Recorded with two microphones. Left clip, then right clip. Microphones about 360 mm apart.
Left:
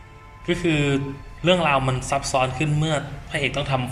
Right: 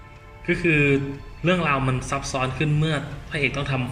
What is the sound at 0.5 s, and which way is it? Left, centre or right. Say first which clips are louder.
A man's voice: right 3 dB; centre.